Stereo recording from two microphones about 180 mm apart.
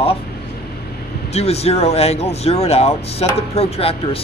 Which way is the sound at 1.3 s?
35° left (ahead or behind).